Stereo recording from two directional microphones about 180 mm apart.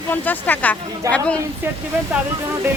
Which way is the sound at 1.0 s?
15° right (ahead or behind).